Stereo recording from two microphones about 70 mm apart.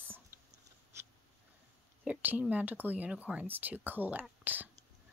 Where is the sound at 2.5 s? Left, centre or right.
Right.